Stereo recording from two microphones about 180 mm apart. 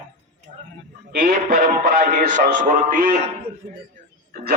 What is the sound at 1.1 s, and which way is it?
A man's voice, 50° right (ahead or behind).